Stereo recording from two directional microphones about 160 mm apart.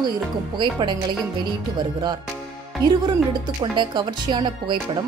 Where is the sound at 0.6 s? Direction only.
30° right (ahead or behind).